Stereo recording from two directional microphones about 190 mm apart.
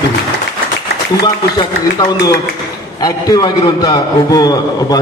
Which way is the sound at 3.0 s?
20° left (ahead or behind).